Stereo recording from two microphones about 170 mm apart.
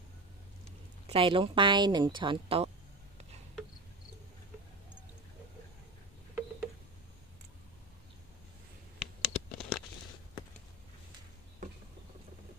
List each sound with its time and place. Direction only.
1.0 s speech: 30° right (ahead or behind)
9.0 s scratch: centre (ahead or behind)